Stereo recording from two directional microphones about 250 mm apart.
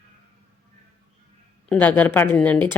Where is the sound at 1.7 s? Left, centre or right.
Centre.